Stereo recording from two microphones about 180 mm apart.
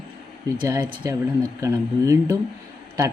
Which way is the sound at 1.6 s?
15° right (ahead or behind).